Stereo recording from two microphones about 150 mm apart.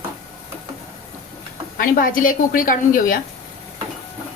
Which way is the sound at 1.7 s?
65° left (ahead or behind).